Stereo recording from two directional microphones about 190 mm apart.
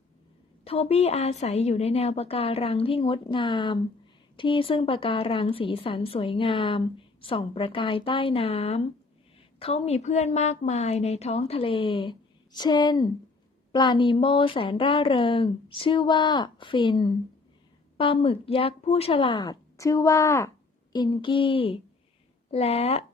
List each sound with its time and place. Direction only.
0.6 s a woman's voice: 30° left (ahead or behind)